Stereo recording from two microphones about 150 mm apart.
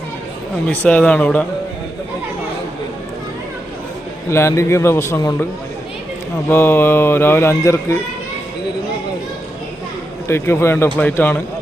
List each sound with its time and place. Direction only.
0.7 s mantra: 10° left (ahead or behind)
4.3 s mantra: 20° left (ahead or behind)
6.5 s mantra: 15° left (ahead or behind)
10.2 s mantra: 15° left (ahead or behind)